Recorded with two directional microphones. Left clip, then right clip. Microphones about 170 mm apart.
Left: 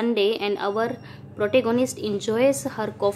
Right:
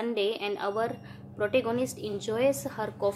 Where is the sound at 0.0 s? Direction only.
20° left (ahead or behind).